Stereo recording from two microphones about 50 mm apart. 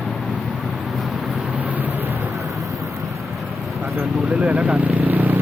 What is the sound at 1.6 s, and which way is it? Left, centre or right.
Vehicle, right.